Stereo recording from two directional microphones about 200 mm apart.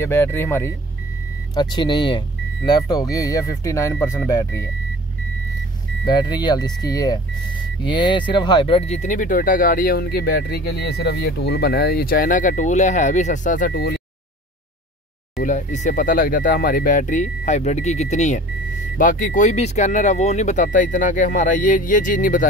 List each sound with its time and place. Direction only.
0.0 s speech: 10° left (ahead or behind)
1.5 s speech: 20° left (ahead or behind)
6.0 s speech: 20° left (ahead or behind); by 14.0 s 50° left (ahead or behind)
15.3 s speech: 40° left (ahead or behind)